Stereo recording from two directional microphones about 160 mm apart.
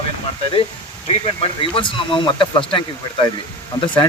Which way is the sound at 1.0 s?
35° left (ahead or behind).